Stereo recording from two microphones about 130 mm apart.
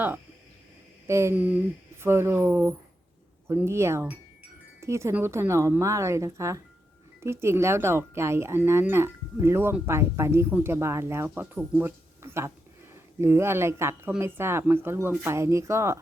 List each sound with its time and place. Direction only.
1.0 s a woman's voice: 20° right (ahead or behind)